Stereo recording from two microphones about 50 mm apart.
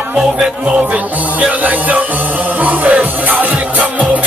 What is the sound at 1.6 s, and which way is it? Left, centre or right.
Speech, right.